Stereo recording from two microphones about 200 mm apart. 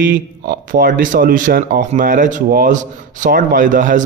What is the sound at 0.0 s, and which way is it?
Speech, 45° right (ahead or behind).